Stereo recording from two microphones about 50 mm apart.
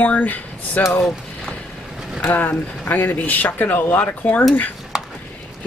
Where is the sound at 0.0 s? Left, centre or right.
Left.